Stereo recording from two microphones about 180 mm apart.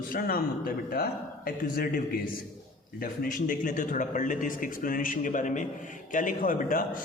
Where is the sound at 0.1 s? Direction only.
55° left (ahead or behind).